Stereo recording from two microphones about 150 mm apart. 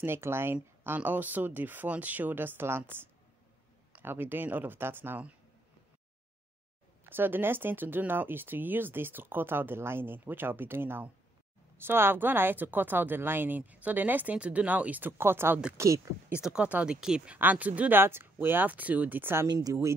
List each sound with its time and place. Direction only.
0.0 s speech: 15° right (ahead or behind)
7.1 s speech: 15° right (ahead or behind)
19.4 s speech: 25° right (ahead or behind)